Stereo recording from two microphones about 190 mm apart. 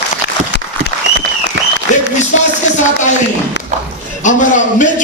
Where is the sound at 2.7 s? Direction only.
40° left (ahead or behind).